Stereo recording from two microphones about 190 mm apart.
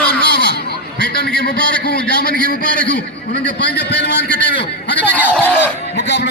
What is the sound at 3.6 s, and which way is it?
Speech, 60° left (ahead or behind).